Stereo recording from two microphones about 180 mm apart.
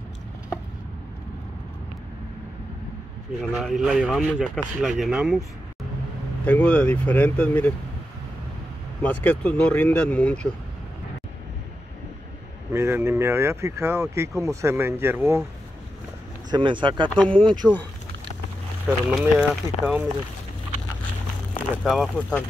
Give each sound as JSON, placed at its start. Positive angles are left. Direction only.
{"t": 3.3, "sound": "speech", "side_deg": 0}
{"t": 6.4, "sound": "speech", "side_deg": 10}
{"t": 9.0, "sound": "speech", "side_deg": 10}
{"t": 12.7, "sound": "speech", "side_deg": -15}
{"t": 16.4, "sound": "speech", "side_deg": -25}
{"t": 17.1, "sound": "speech", "side_deg": 5}
{"t": 18.9, "sound": "speech", "side_deg": -5}
{"t": 21.8, "sound": "speech", "side_deg": 0}